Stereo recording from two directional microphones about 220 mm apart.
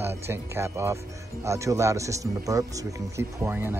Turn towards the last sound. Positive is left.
turn(degrees=-10)  # may be behind; listen again after turning